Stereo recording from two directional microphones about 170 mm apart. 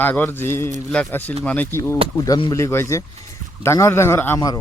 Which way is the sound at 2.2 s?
25° left (ahead or behind).